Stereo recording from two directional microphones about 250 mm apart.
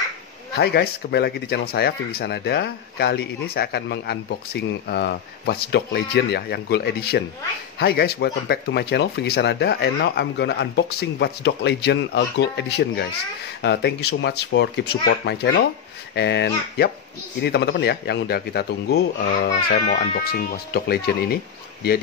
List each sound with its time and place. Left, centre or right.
0.6 s speech: left